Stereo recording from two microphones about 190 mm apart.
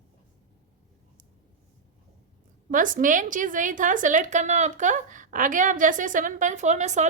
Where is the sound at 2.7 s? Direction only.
45° right (ahead or behind).